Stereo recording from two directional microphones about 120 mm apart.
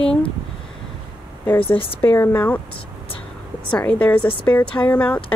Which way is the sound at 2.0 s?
20° left (ahead or behind).